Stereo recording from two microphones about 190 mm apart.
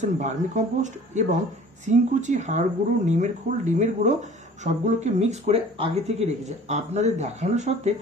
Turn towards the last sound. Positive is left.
turn(degrees=-35)  # may be behind; listen again after turning